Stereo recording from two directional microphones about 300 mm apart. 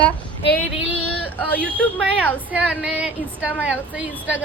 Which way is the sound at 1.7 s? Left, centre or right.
Centre.